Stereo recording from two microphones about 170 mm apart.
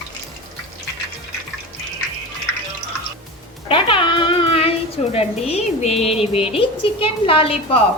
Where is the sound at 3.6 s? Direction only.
30° left (ahead or behind).